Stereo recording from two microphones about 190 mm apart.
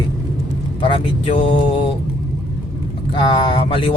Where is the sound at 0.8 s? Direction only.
30° left (ahead or behind).